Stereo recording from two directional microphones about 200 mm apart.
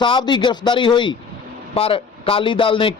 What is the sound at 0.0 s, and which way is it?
A man's voice, 25° left (ahead or behind).